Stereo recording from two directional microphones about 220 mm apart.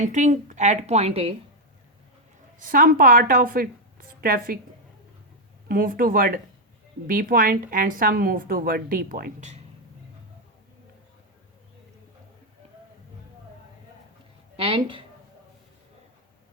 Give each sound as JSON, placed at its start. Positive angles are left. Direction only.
{"t": 0.0, "sound": "a woman's voice", "side_deg": -35}
{"t": 2.6, "sound": "a woman's voice", "side_deg": -40}
{"t": 5.6, "sound": "a woman's voice", "side_deg": -40}
{"t": 14.5, "sound": "speech", "side_deg": -25}